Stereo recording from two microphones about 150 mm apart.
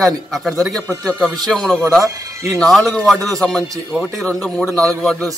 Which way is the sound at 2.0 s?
20° right (ahead or behind).